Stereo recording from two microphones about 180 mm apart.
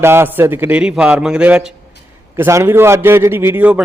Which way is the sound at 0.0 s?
15° right (ahead or behind).